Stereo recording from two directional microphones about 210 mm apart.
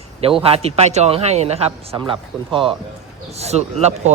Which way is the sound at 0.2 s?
25° right (ahead or behind).